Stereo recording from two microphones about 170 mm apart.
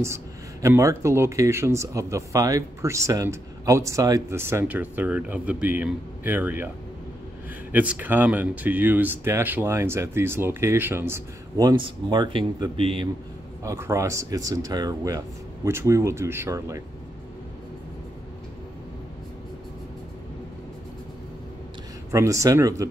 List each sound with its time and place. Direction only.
0.0 s speech: 15° right (ahead or behind)
7.7 s speech: 10° right (ahead or behind); by 13.1 s 30° right (ahead or behind)
13.7 s speech: 15° right (ahead or behind)
22.1 s speech: 20° right (ahead or behind)